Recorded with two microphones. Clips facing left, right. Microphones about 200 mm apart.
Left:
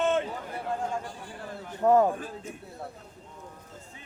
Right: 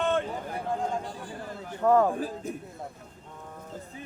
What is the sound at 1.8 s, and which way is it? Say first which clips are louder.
Speech: left 1 dB; 15° left (ahead or behind).